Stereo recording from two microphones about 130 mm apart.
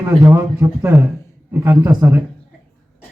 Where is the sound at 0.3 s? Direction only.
15° right (ahead or behind).